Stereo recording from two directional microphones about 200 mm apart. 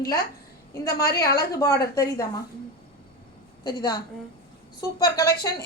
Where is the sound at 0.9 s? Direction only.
50° left (ahead or behind).